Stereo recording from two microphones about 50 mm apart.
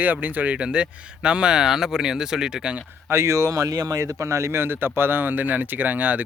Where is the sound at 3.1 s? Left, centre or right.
Right.